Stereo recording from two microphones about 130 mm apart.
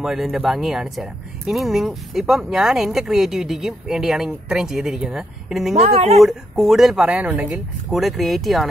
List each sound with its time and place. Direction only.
0.0 s speech: 5° right (ahead or behind)
5.8 s speech: 50° right (ahead or behind)
6.1 s speech: centre (ahead or behind)